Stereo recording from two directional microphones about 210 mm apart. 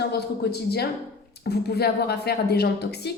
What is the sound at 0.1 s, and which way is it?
A woman's voice, 50° left (ahead or behind).